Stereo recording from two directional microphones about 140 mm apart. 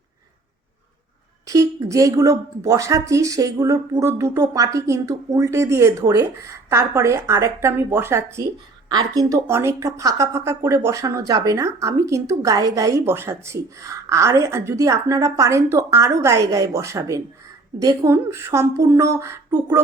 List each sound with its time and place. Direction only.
1.5 s speech: 25° right (ahead or behind)